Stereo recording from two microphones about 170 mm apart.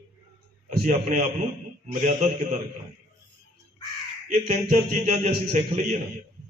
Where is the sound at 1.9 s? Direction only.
45° right (ahead or behind).